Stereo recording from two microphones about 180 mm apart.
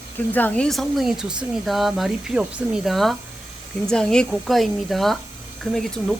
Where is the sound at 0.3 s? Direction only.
10° left (ahead or behind).